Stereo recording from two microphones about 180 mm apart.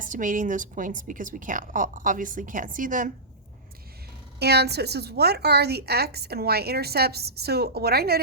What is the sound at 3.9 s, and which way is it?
A woman's voice, 60° right (ahead or behind).